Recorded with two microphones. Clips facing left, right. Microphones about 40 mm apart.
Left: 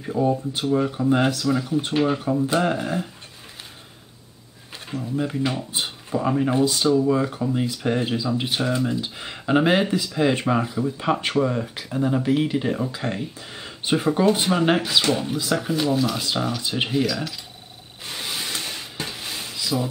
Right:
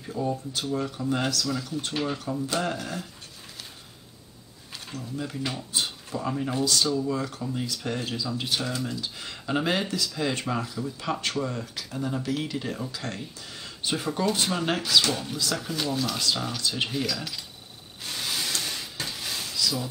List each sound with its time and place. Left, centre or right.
0.0 s speech: left
4.9 s speech: left
17.0 s speech: centre
18.0 s stir: centre